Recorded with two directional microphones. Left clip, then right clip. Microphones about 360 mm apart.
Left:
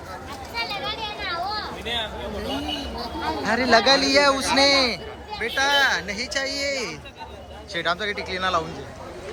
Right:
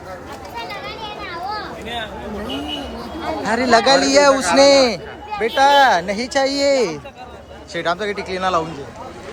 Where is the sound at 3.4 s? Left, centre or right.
Centre.